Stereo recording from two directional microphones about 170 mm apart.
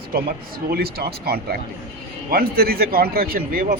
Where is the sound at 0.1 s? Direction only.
60° right (ahead or behind).